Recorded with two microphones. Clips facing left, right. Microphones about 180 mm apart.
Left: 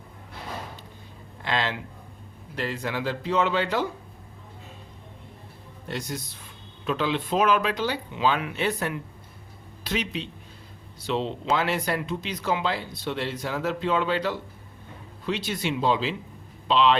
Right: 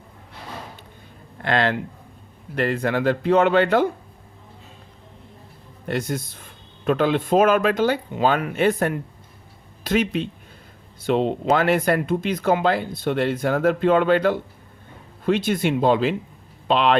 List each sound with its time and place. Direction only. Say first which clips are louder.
1.4 s speech: right 7 dB; 55° right (ahead or behind)
5.8 s speech: right 7 dB; 55° right (ahead or behind)